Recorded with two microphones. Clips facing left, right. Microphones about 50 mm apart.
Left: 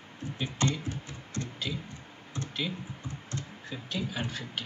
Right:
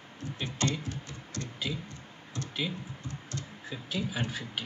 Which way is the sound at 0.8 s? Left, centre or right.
Left.